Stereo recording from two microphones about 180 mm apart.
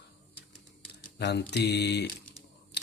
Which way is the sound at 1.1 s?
70° left (ahead or behind).